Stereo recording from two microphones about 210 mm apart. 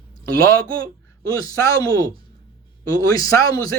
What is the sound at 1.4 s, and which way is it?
Speech, 15° left (ahead or behind).